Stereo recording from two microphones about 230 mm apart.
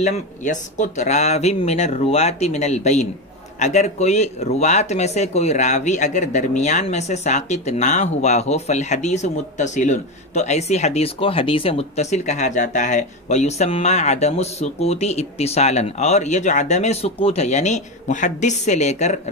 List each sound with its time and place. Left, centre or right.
0.0 s speech: left